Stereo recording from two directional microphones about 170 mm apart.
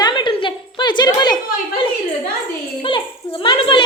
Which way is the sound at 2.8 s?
30° left (ahead or behind).